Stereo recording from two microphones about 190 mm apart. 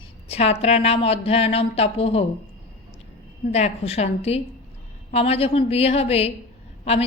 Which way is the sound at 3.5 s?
35° left (ahead or behind).